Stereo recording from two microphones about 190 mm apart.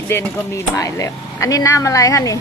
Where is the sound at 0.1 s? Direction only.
15° left (ahead or behind).